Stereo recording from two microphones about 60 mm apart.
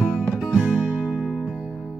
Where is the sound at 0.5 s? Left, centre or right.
Right.